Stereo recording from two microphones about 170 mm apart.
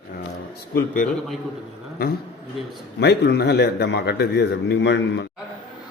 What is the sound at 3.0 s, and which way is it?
A man's voice, 75° left (ahead or behind).